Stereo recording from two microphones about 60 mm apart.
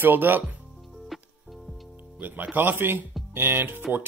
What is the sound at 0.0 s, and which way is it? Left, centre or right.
Speech, right.